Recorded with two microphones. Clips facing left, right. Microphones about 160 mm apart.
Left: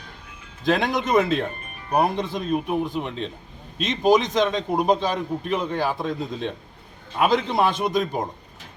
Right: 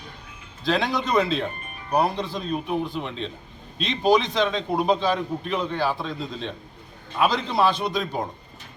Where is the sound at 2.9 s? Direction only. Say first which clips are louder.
Left 2 dB; 5° left (ahead or behind).